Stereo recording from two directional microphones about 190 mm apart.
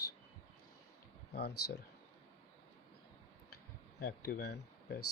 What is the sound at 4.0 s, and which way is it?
Speech, 60° left (ahead or behind).